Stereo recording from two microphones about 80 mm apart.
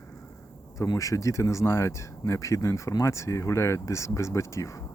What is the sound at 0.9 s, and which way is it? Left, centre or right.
Speech, left.